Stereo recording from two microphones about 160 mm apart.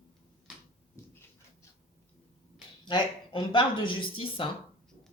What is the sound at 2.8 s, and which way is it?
Speech, 30° left (ahead or behind).